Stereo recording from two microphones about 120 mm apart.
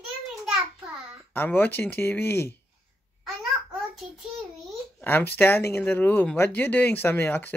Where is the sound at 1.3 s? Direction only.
15° left (ahead or behind).